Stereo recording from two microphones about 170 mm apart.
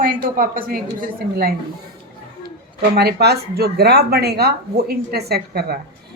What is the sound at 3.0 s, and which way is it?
A woman's voice, 70° right (ahead or behind).